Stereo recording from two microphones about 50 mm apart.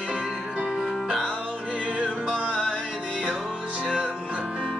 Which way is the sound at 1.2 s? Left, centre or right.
Right.